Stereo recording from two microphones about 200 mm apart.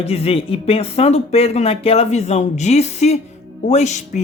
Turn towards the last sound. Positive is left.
turn(degrees=35)  # may be behind; listen again after turning